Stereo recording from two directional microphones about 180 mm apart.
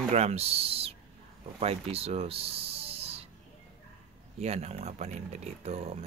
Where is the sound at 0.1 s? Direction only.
35° right (ahead or behind).